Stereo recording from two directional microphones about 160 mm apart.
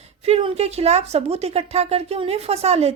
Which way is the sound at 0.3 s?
40° right (ahead or behind).